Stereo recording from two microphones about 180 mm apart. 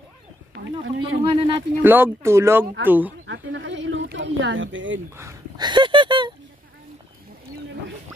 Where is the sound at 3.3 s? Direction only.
85° right.